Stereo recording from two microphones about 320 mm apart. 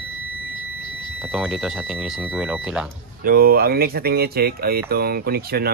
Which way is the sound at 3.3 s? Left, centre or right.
Right.